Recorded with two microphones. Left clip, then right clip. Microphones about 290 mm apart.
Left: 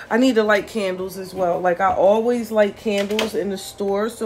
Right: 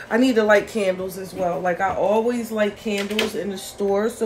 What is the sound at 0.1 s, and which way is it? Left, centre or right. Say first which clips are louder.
Speech: even; centre.